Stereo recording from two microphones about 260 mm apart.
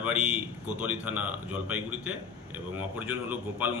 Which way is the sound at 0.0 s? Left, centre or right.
Centre.